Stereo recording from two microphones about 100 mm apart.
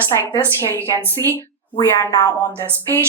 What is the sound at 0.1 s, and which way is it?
Speech, 25° left (ahead or behind).